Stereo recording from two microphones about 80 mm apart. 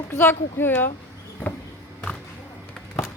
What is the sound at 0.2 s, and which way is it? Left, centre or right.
Speech, left.